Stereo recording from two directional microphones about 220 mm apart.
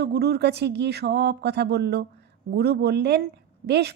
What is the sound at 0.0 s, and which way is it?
Speech, 45° right (ahead or behind).